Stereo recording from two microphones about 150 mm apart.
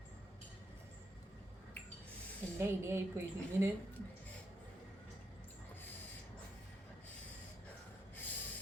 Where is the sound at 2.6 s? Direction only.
15° right (ahead or behind).